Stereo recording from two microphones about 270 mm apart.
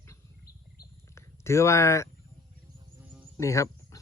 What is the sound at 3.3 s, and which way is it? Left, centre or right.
Insect, centre.